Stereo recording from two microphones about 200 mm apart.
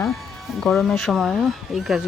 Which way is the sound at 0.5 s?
Centre (ahead or behind).